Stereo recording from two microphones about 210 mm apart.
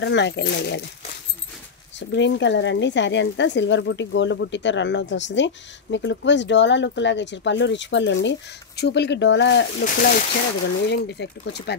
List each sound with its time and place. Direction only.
0.0 s speech: 55° left (ahead or behind)
2.0 s speech: 60° left (ahead or behind)
9.8 s speech: 40° left (ahead or behind)
10.9 s speech: 55° left (ahead or behind)